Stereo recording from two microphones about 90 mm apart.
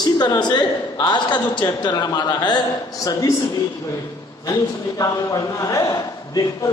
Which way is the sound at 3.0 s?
40° left (ahead or behind).